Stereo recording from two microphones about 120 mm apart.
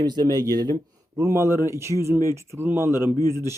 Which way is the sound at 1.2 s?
25° right (ahead or behind).